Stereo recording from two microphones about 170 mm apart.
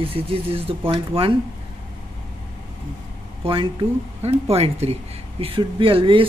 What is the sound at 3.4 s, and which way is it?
Speech, 30° right (ahead or behind).